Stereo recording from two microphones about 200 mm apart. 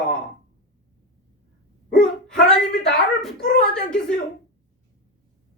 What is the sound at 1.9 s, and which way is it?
Wail, 5° left (ahead or behind).